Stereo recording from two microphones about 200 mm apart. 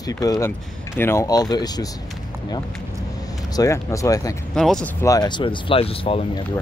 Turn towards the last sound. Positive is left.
turn(degrees=25)  # may be behind; listen again after turning